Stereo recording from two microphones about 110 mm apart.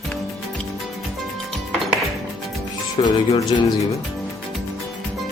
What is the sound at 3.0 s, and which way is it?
Music, 55° left (ahead or behind).